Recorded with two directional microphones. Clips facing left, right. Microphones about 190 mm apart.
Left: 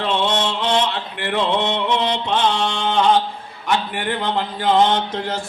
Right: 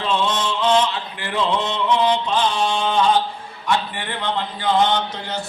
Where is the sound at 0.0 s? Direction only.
65° left (ahead or behind).